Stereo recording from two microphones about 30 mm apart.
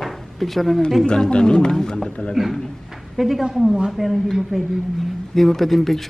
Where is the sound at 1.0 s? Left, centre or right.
Left.